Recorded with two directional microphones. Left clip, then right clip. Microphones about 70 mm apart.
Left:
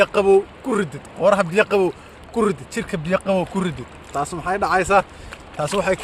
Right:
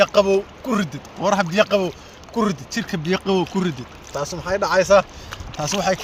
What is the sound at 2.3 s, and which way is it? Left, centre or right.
Speech, left.